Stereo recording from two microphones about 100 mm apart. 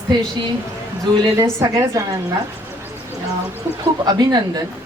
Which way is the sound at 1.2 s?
35° right (ahead or behind).